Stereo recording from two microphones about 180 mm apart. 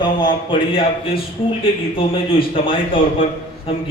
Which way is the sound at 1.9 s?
30° left (ahead or behind).